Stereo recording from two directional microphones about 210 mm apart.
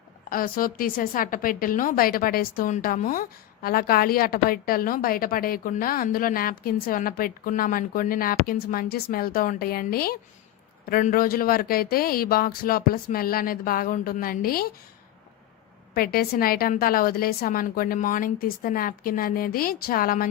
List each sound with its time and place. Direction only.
0.3 s a woman's voice: 40° left (ahead or behind)
16.0 s a woman's voice: 45° left (ahead or behind)